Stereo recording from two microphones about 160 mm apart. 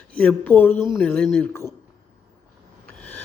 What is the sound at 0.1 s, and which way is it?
Speech, 5° left (ahead or behind).